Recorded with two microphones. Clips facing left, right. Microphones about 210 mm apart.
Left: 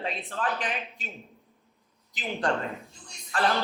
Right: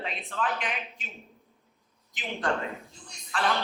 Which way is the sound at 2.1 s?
40° left (ahead or behind).